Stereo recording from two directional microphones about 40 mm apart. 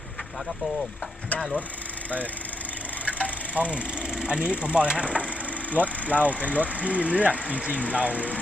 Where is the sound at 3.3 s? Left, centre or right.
Right.